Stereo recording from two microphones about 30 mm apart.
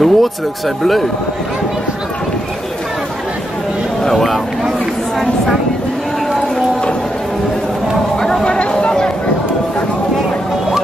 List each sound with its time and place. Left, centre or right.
0.0 s speech: centre
8.5 s chatter: left